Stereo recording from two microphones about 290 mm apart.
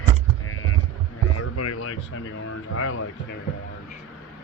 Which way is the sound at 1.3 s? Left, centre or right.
Left.